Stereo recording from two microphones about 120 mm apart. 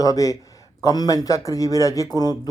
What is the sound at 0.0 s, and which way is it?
Speech, 30° left (ahead or behind).